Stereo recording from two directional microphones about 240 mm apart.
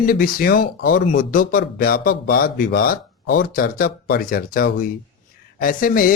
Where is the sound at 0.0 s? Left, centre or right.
Left.